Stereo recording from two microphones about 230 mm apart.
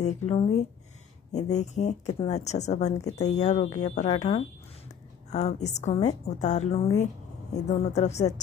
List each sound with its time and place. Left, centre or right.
0.0 s a woman's voice: left
3.0 s speech: centre
3.3 s a woman's voice: left